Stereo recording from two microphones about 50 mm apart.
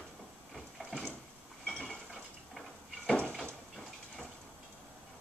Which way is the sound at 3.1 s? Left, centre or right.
Centre.